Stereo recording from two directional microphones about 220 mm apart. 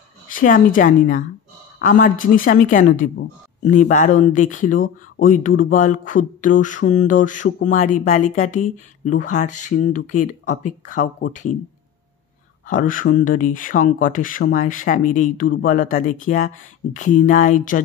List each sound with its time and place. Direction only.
0.3 s mantra: 40° left (ahead or behind)
5.1 s speech: 35° left (ahead or behind)
5.6 s mantra: 35° left (ahead or behind)
12.6 s mantra: 35° left (ahead or behind)